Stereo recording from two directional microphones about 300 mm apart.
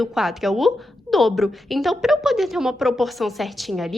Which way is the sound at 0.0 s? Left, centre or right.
Centre.